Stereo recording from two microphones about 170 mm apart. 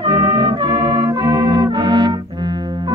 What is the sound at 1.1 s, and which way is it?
Brass instrument, 20° right (ahead or behind).